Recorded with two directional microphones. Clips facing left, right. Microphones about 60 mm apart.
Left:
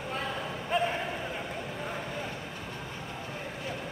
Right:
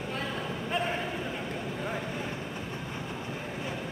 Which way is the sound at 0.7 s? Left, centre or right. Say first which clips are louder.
Left 3 dB; centre.